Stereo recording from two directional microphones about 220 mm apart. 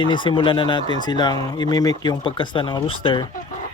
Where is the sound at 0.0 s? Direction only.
20° left (ahead or behind).